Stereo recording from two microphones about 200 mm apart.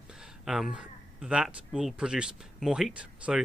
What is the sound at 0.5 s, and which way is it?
Speech, 5° right (ahead or behind).